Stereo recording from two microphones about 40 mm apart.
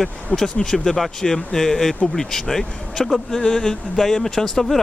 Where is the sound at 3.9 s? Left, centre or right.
Centre.